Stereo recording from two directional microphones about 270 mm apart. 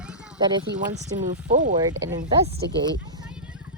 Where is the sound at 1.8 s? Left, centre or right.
Centre.